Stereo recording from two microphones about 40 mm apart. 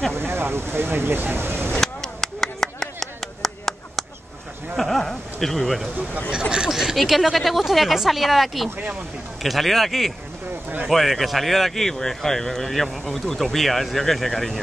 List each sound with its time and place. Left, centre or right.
0.1 s speech: right
1.7 s a sound: centre
6.7 s speech: centre
7.0 s speech: centre